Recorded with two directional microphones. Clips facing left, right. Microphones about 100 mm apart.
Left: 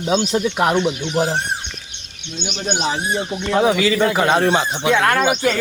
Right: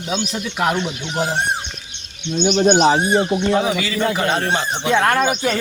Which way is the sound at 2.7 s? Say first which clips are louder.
Right 5 dB; 45° right (ahead or behind).